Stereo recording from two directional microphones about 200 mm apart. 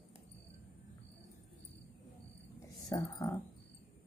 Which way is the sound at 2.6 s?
15° left (ahead or behind).